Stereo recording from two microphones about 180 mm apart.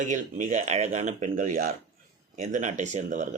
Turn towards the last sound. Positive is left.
turn(degrees=-40)  # may be behind; listen again after turning